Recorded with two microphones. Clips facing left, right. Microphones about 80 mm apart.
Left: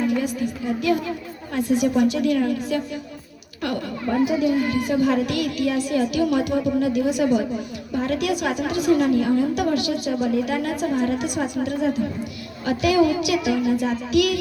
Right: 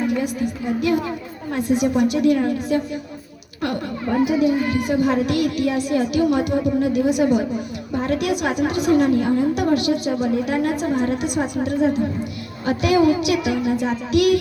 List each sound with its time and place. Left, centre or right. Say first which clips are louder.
0.8 s speech: right 2 dB; right
4.0 s speech: right 2 dB; right